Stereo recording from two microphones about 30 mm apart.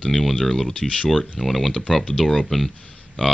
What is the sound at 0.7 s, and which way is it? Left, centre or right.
Speech, left.